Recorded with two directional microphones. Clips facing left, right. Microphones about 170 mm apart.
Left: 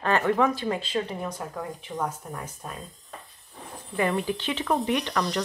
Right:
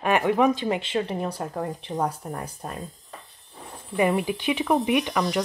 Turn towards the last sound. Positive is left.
turn(degrees=-10)  # may be behind; listen again after turning